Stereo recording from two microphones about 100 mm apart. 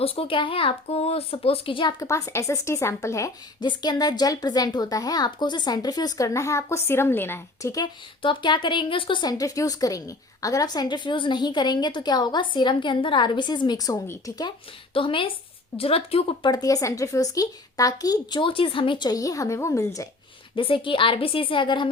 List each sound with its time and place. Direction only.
0.0 s speech: 70° left (ahead or behind); by 2.0 s 55° left (ahead or behind)
2.0 s a woman's voice: 35° left (ahead or behind)
3.6 s a woman's voice: 45° left (ahead or behind); by 7.7 s 25° left (ahead or behind)
8.2 s a woman's voice: 55° left (ahead or behind)
9.2 s a woman's voice: 35° left (ahead or behind)
14.9 s a woman's voice: 60° left (ahead or behind)
15.8 s speech: 75° left (ahead or behind)
16.5 s a woman's voice: 40° left (ahead or behind)
20.6 s a woman's voice: 60° left (ahead or behind)